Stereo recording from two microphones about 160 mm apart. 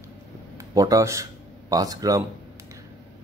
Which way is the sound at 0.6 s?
20° right (ahead or behind).